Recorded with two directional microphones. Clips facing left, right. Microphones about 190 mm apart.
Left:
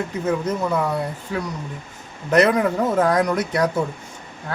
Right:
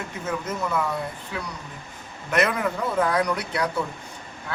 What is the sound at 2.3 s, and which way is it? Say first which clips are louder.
A man's voice: left 7 dB; 35° left (ahead or behind).